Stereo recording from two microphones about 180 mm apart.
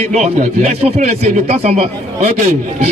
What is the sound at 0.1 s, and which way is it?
Speech, 40° right (ahead or behind).